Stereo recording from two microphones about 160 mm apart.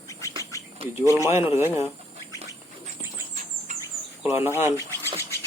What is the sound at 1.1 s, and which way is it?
Speech, 15° right (ahead or behind).